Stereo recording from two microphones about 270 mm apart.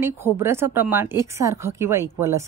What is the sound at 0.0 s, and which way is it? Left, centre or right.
Speech, centre.